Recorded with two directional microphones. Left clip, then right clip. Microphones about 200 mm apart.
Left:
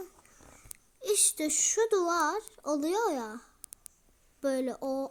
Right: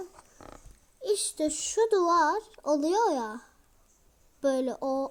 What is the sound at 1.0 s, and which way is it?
Speech, 10° left (ahead or behind).